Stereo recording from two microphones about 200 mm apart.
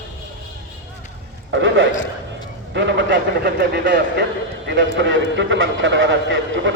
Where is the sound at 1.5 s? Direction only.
65° right (ahead or behind).